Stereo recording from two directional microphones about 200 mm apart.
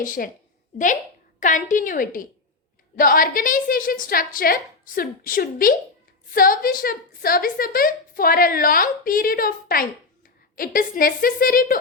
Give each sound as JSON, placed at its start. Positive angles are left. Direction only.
{"t": 0.0, "sound": "a woman's voice", "side_deg": 40}
{"t": 1.4, "sound": "a woman's voice", "side_deg": 40}